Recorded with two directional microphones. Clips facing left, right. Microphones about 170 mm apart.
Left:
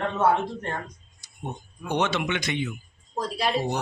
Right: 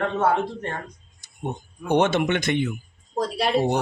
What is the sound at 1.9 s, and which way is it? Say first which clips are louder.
Speech: right 6 dB; 50° right (ahead or behind).